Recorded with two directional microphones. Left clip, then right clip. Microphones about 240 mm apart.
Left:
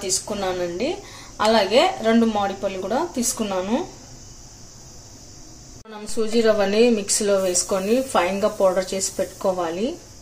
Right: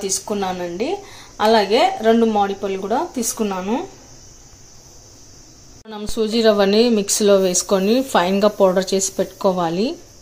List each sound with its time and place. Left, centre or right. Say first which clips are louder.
0.3 s speech: right 2 dB; centre
6.4 s speech: right 3 dB; right